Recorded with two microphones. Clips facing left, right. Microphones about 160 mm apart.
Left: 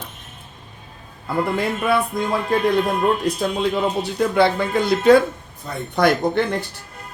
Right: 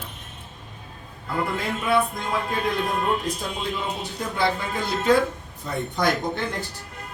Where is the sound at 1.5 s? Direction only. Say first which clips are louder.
Left 1 dB; 75° left (ahead or behind).